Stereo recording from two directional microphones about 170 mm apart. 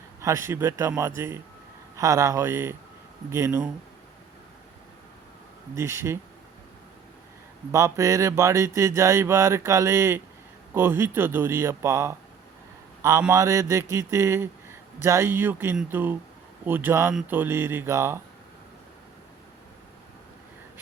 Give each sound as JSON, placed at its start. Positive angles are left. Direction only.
{"t": 0.2, "sound": "mantra", "side_deg": -15}
{"t": 5.7, "sound": "mantra", "side_deg": -15}
{"t": 7.7, "sound": "mantra", "side_deg": -20}
{"t": 13.3, "sound": "mantra", "side_deg": -20}